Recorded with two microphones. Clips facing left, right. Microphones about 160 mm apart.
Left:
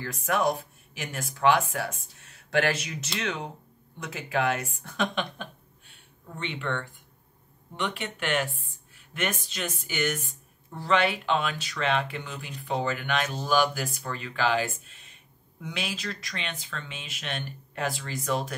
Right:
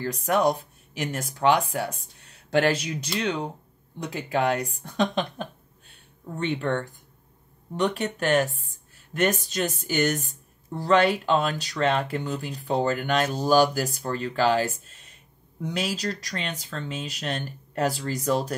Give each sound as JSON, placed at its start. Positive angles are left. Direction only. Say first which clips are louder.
{"t": 0.0, "sound": "speech", "louder": "right 4 dB", "side_deg": -35}
{"t": 14.9, "sound": "a sound", "louder": "right 1 dB", "side_deg": -40}
{"t": 15.6, "sound": "speech", "louder": "right 6 dB", "side_deg": -40}